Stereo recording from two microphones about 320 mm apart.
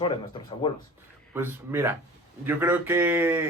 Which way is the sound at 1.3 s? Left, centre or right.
Centre.